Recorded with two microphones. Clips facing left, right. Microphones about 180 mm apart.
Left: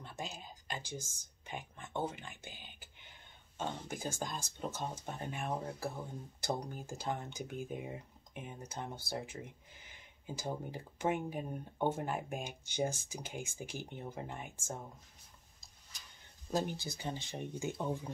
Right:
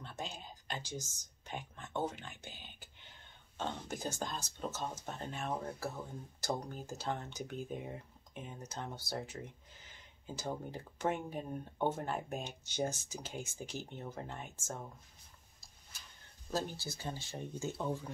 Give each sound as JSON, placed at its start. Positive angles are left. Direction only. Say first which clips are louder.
{"t": 0.0, "sound": "a sound", "louder": "even", "side_deg": 10}
{"t": 1.0, "sound": "speech", "louder": "right 1 dB", "side_deg": 10}
{"t": 16.4, "sound": "speech", "louder": "left 2 dB", "side_deg": 15}